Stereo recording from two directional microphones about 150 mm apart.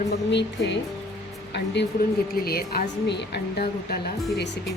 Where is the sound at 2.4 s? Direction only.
90° left.